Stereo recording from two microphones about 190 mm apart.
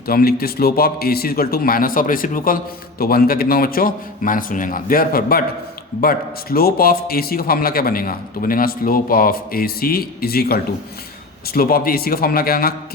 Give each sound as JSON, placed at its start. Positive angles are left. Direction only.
{"t": 0.1, "sound": "a man's voice", "side_deg": 55}